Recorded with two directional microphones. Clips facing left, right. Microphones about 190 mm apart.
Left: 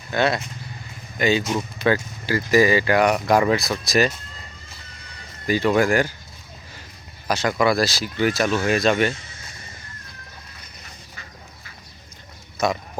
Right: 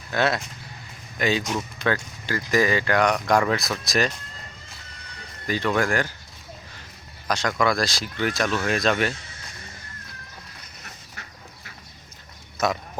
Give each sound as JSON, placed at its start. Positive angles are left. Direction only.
{"t": 0.1, "sound": "speech", "side_deg": 0}
{"t": 5.5, "sound": "speech", "side_deg": 10}
{"t": 7.3, "sound": "speech", "side_deg": 5}
{"t": 10.8, "sound": "duck", "side_deg": -70}
{"t": 12.6, "sound": "speech", "side_deg": 0}